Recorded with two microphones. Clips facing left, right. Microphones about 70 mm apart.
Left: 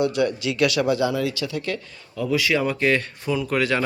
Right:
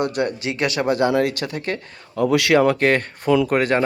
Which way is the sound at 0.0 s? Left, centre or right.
Right.